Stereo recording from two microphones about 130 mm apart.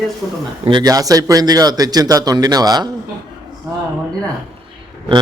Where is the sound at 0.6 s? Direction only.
35° right (ahead or behind).